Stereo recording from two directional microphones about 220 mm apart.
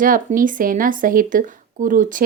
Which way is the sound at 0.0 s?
40° right (ahead or behind).